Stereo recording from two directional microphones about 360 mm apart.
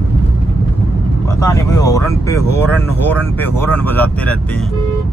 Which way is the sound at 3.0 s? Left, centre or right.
Centre.